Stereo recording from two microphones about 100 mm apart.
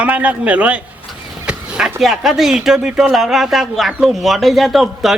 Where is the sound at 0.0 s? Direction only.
15° right (ahead or behind).